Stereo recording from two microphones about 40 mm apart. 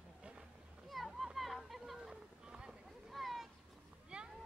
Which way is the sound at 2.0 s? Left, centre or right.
Centre.